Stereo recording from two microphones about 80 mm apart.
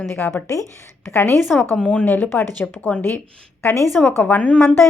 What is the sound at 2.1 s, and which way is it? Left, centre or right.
Speech, left.